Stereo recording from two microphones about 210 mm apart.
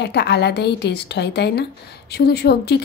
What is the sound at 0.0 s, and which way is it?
A woman's voice, 55° left (ahead or behind).